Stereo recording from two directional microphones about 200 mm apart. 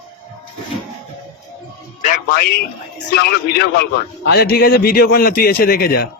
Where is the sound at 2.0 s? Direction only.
45° left (ahead or behind).